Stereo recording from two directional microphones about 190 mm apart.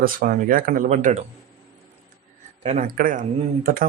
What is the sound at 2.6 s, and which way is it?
Speech, 35° right (ahead or behind).